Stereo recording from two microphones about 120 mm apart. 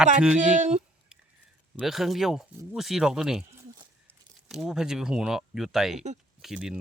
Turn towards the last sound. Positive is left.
turn(degrees=-5)  # may be behind; listen again after turning